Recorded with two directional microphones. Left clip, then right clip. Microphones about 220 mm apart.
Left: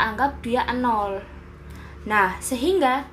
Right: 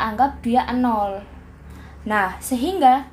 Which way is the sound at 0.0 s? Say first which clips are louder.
Right 2 dB; 25° right (ahead or behind).